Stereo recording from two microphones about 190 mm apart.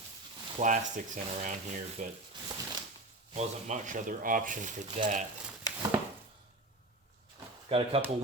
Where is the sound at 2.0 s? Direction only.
45° right (ahead or behind).